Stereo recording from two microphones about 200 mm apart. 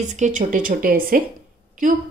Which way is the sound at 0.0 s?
35° right (ahead or behind).